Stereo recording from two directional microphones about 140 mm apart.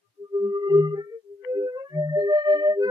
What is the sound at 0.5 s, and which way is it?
Music, 30° right (ahead or behind).